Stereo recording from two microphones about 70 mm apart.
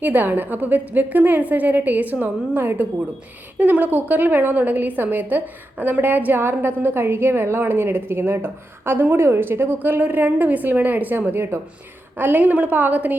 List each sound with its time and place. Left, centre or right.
0.0 s a woman's voice: right